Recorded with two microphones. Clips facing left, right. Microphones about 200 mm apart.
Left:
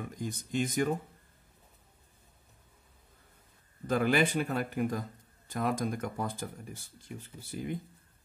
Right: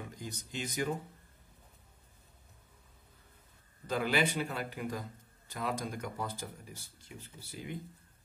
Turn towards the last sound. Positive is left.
turn(degrees=50)  # may be behind; listen again after turning